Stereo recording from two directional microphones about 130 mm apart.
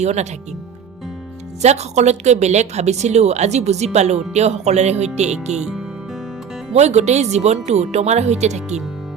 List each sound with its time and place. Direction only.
0.0 s a woman's voice: 60° right (ahead or behind)
1.6 s a woman's voice: 60° right (ahead or behind)
5.5 s speech: 5° right (ahead or behind)
6.7 s a woman's voice: 60° right (ahead or behind)